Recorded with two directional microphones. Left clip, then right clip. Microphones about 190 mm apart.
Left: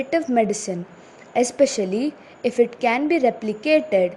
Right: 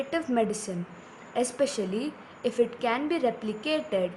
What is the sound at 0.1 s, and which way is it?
A woman's voice, 30° left (ahead or behind).